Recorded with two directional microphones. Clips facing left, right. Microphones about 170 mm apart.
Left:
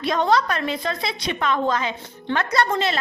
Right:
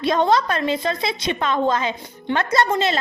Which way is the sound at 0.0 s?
25° right (ahead or behind).